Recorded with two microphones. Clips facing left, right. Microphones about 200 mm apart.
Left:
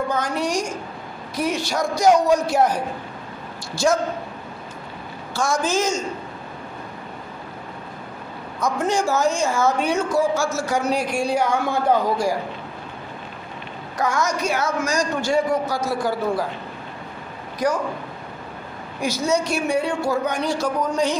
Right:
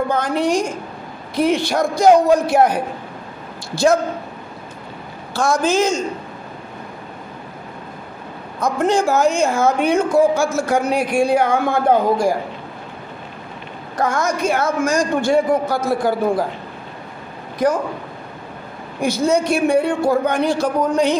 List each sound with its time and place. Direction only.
0.1 s a woman's voice: 55° right (ahead or behind)
5.3 s a woman's voice: 60° right (ahead or behind)
8.5 s a woman's voice: 55° right (ahead or behind)
13.9 s a man's voice: 55° right (ahead or behind)
17.6 s a man's voice: 55° right (ahead or behind)
18.9 s a woman's voice: 55° right (ahead or behind)